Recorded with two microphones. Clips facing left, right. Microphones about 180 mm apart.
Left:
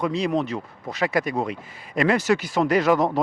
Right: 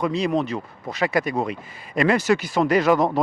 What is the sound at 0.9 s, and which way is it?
Speech, 15° right (ahead or behind).